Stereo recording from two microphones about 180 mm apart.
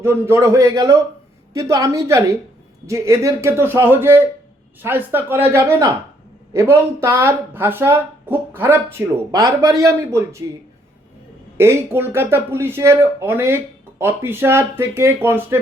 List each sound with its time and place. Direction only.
0.0 s speech: 15° right (ahead or behind)
11.5 s speech: 15° right (ahead or behind)